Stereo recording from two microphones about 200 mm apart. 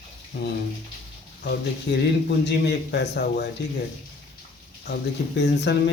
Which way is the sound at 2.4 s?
55° left (ahead or behind).